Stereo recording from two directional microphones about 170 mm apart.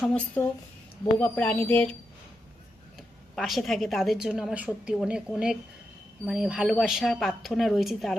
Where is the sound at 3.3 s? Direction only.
Centre (ahead or behind).